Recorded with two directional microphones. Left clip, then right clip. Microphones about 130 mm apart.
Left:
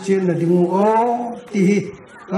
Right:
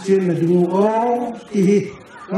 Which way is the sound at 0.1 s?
40° left (ahead or behind).